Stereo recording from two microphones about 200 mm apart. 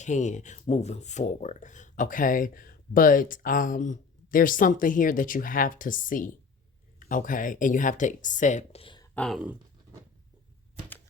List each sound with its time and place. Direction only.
0.0 s speech: 35° left (ahead or behind)
9.1 s speech: centre (ahead or behind)